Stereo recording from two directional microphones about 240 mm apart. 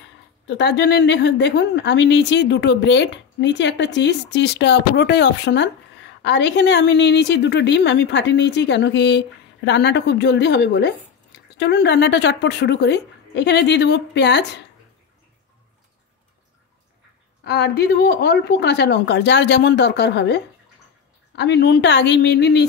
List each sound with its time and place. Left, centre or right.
0.5 s a woman's voice: left
17.5 s a woman's voice: left